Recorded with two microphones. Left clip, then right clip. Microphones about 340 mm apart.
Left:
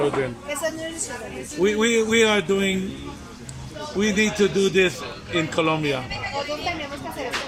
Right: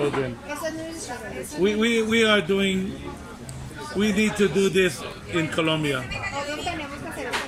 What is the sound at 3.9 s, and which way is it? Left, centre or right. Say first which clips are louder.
A man's voice: left 2 dB; centre.